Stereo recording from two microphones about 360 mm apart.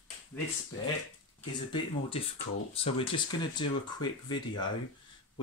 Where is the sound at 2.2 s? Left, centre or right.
Centre.